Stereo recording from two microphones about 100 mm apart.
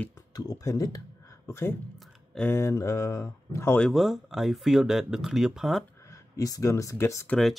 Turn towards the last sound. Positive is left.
turn(degrees=0)  # may be behind; listen again after turning